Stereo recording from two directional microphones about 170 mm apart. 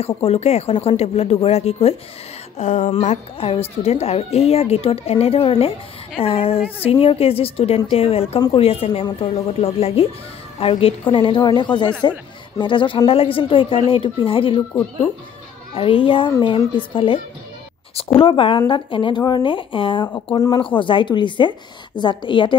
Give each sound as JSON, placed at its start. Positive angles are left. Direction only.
{"t": 0.0, "sound": "a woman's voice", "side_deg": 40}
{"t": 15.7, "sound": "a woman's voice", "side_deg": 30}